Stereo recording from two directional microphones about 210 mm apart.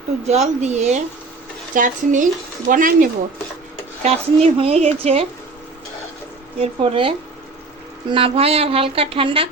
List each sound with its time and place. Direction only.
0.3 s a woman's voice: 35° right (ahead or behind)
6.6 s a woman's voice: 25° right (ahead or behind)
8.1 s a woman's voice: 25° right (ahead or behind)